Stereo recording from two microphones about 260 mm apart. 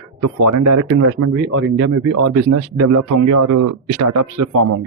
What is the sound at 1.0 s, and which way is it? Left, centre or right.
Speech, right.